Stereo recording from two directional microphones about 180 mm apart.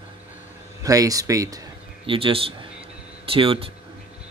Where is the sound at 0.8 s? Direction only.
20° right (ahead or behind).